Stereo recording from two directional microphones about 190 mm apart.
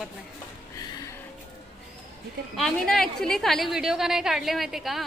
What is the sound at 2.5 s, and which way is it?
A woman's voice, centre (ahead or behind).